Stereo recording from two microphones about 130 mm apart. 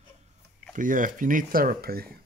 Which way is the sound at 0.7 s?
90° right.